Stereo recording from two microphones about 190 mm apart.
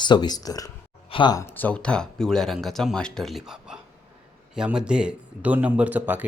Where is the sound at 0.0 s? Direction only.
25° left (ahead or behind).